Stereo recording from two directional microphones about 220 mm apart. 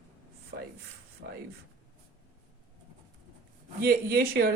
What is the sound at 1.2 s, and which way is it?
Speech, 50° right (ahead or behind).